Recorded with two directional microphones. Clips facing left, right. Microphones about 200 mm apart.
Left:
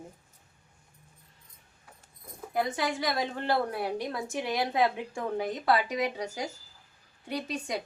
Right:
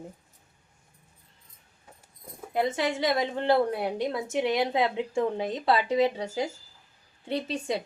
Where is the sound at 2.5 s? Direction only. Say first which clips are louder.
Right 3 dB; 25° right (ahead or behind).